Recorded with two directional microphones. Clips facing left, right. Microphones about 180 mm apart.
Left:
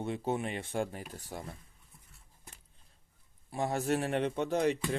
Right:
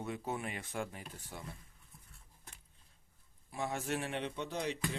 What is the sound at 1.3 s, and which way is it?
Speech, 50° left (ahead or behind).